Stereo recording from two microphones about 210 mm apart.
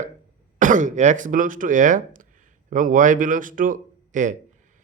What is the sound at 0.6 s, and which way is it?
Speech, 40° right (ahead or behind).